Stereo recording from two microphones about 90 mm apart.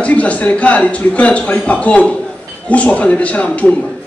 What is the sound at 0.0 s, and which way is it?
A man's voice, 15° left (ahead or behind).